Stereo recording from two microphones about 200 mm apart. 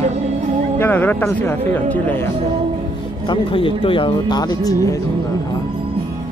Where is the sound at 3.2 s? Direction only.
25° left (ahead or behind).